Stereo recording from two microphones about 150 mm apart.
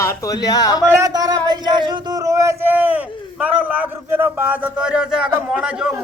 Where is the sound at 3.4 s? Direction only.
10° right (ahead or behind).